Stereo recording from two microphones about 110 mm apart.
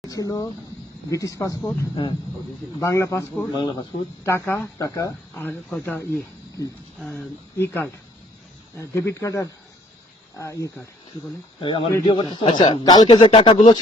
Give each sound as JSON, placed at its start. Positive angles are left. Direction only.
{"t": 0.1, "sound": "speech", "side_deg": 35}
{"t": 2.8, "sound": "speech", "side_deg": 25}
{"t": 3.5, "sound": "speech", "side_deg": 45}
{"t": 4.2, "sound": "speech", "side_deg": 20}
{"t": 4.8, "sound": "speech", "side_deg": 30}
{"t": 5.3, "sound": "speech", "side_deg": 15}
{"t": 7.6, "sound": "speech", "side_deg": 20}
{"t": 11.6, "sound": "speech", "side_deg": 50}
{"t": 12.8, "sound": "speech", "side_deg": 35}